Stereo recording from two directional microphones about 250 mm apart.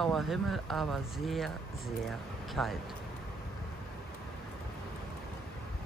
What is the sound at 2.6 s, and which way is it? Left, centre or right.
Speech, centre.